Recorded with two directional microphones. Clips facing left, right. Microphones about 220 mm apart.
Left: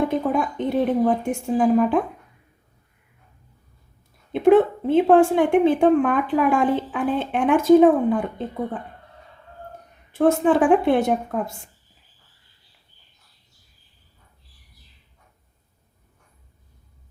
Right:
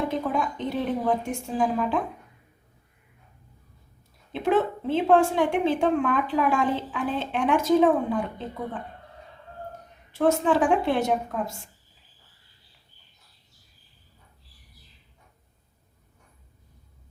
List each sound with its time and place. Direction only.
0.1 s a woman's voice: 55° left (ahead or behind)
4.3 s a woman's voice: 55° left (ahead or behind)
10.1 s a woman's voice: 55° left (ahead or behind)